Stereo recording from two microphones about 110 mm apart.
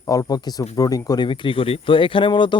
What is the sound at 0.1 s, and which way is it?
Speech, 30° left (ahead or behind).